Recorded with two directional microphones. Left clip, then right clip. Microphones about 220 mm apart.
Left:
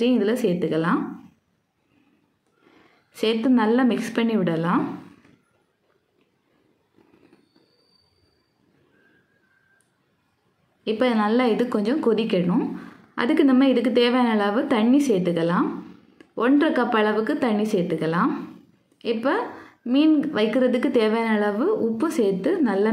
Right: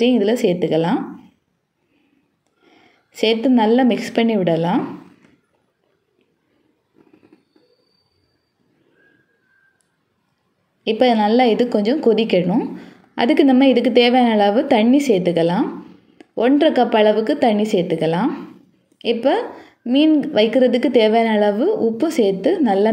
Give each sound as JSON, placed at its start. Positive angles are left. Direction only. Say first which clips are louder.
{"t": 0.3, "sound": "a woman's voice", "louder": "right 6 dB", "side_deg": 25}
{"t": 0.6, "sound": "a woman's voice", "louder": "right 5 dB", "side_deg": -15}
{"t": 3.2, "sound": "a woman's voice", "louder": "right 5 dB", "side_deg": -10}
{"t": 10.8, "sound": "a woman's voice", "louder": "right 7 dB", "side_deg": -10}